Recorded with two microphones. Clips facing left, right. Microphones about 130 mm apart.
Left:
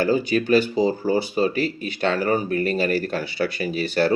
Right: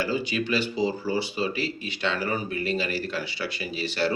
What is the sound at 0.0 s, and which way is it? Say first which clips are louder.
Speech: left 7 dB; 45° left (ahead or behind).